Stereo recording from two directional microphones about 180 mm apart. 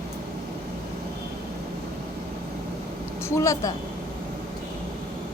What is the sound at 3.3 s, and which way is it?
Speech, 15° left (ahead or behind).